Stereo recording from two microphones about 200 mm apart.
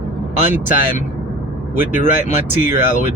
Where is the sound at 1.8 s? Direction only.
40° left (ahead or behind).